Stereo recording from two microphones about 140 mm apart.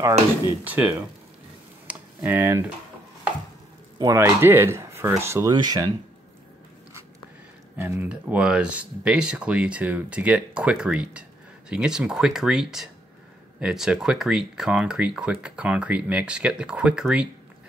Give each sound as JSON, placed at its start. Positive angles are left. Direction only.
{"t": 0.7, "sound": "speech", "side_deg": -10}
{"t": 1.9, "sound": "computer keyboard", "side_deg": -15}
{"t": 4.0, "sound": "speech", "side_deg": -20}
{"t": 7.7, "sound": "speech", "side_deg": -15}